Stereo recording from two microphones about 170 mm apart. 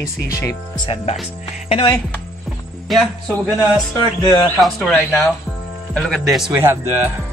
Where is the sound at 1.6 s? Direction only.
35° left (ahead or behind).